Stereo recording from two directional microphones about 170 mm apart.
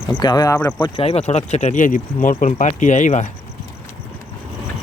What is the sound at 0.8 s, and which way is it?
Speech, 30° left (ahead or behind).